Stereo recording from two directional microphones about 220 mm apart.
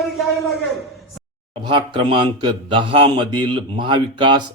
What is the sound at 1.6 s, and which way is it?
Speech, 20° right (ahead or behind).